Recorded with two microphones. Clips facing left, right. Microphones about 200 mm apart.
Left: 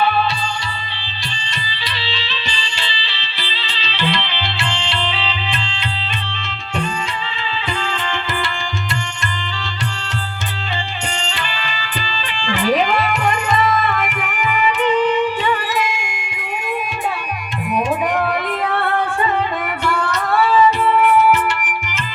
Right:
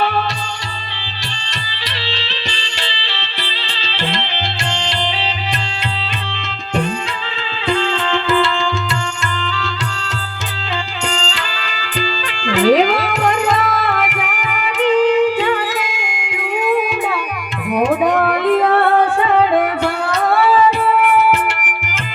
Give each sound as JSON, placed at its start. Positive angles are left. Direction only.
{"t": 2.0, "sound": "music", "side_deg": -70}
{"t": 12.5, "sound": "music", "side_deg": -80}
{"t": 16.2, "sound": "a sound", "side_deg": -70}
{"t": 17.7, "sound": "music", "side_deg": -70}